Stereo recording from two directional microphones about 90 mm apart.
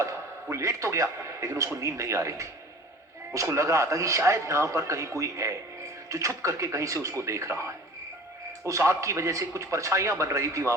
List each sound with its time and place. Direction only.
0.5 s a man's voice: 35° right (ahead or behind)